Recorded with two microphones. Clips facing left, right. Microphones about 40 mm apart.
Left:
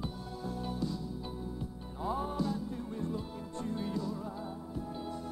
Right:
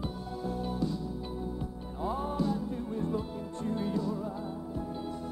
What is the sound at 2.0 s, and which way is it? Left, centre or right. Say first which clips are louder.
Music: right 2 dB; centre.